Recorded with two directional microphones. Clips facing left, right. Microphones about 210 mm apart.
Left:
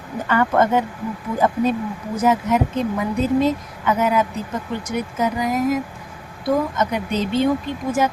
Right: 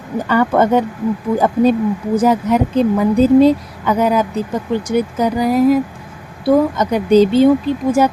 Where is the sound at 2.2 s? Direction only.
35° right (ahead or behind).